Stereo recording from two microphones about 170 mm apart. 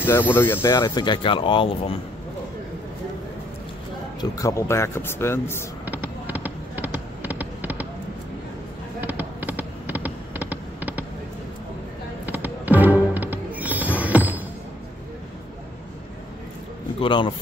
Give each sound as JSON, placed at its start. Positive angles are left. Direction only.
{"t": 0.0, "sound": "speech", "side_deg": 10}
{"t": 4.2, "sound": "a man's voice", "side_deg": 20}
{"t": 5.9, "sound": "fireworks", "side_deg": -10}
{"t": 9.0, "sound": "fireworks", "side_deg": -10}
{"t": 12.3, "sound": "music", "side_deg": -10}
{"t": 17.0, "sound": "speech", "side_deg": 30}